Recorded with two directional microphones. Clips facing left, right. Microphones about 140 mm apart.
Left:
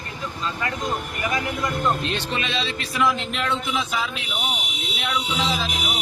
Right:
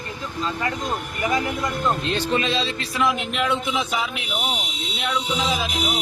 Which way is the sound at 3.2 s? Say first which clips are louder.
Right 2 dB; 5° right (ahead or behind).